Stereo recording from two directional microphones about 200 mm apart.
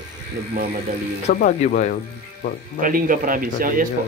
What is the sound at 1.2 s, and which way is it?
Speech, 40° left (ahead or behind).